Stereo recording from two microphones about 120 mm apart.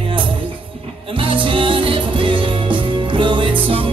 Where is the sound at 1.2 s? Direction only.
45° right (ahead or behind).